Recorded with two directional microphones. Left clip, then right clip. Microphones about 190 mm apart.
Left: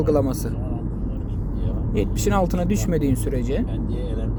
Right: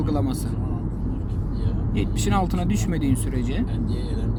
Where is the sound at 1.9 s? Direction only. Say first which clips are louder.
Left 3 dB; 10° left (ahead or behind).